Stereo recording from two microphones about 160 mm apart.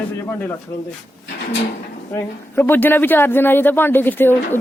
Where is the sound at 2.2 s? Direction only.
15° left (ahead or behind).